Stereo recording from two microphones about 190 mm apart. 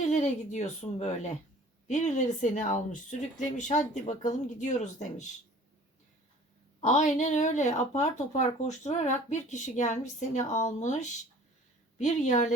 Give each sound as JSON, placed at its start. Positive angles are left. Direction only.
{"t": 0.1, "sound": "speech", "side_deg": 40}
{"t": 6.8, "sound": "speech", "side_deg": 40}